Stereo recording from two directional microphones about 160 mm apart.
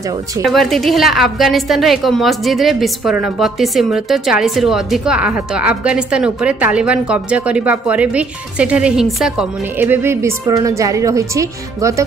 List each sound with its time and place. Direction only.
0.4 s a woman's voice: centre (ahead or behind)
9.8 s a woman's voice: 15° right (ahead or behind)